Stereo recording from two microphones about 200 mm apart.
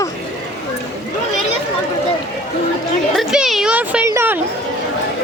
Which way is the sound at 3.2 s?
Centre (ahead or behind).